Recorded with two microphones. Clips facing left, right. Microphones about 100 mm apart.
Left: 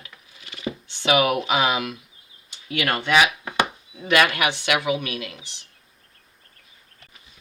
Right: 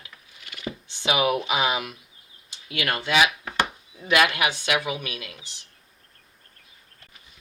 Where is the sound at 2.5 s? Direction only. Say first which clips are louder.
Left 3 dB; 55° left (ahead or behind).